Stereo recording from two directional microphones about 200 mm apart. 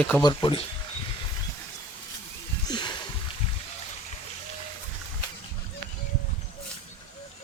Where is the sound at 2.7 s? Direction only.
20° left (ahead or behind).